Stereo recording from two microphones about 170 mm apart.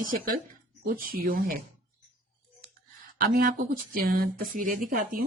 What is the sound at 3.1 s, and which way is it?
A woman's voice, 60° right (ahead or behind).